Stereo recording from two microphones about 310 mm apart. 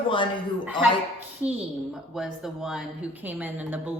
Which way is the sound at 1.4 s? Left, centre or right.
Centre.